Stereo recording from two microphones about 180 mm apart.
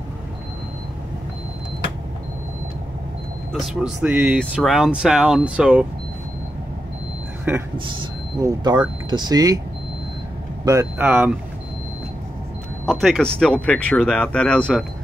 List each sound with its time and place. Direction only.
3.5 s speech: centre (ahead or behind)
7.7 s speech: 25° right (ahead or behind)
10.6 s speech: 15° right (ahead or behind)
12.8 s speech: centre (ahead or behind)